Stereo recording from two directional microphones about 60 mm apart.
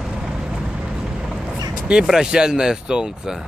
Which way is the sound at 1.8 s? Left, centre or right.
Centre.